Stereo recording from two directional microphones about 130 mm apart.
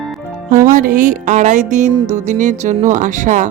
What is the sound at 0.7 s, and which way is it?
A woman's voice, 90° right.